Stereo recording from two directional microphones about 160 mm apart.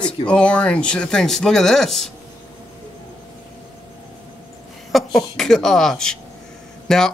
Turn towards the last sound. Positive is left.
turn(degrees=5)  # may be behind; listen again after turning